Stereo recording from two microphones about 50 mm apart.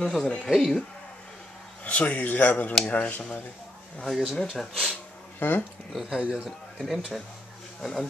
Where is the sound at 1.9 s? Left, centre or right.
Left.